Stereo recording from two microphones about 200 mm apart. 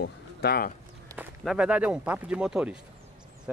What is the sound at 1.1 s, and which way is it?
Speech, 5° right (ahead or behind).